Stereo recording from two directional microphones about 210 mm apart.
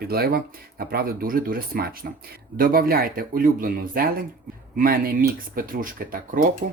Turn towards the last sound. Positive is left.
turn(degrees=-40)  # may be behind; listen again after turning